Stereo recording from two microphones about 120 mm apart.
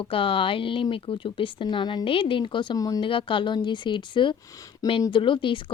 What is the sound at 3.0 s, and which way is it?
A woman's voice, 45° left (ahead or behind).